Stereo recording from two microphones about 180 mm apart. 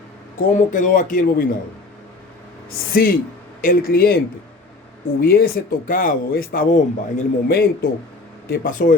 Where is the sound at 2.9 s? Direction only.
55° left (ahead or behind).